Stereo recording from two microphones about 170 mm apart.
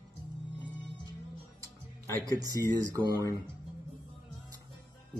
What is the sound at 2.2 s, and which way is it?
Speech, 20° right (ahead or behind).